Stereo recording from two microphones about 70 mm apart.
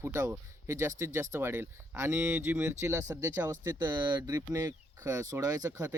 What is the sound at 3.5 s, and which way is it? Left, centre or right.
Speech, right.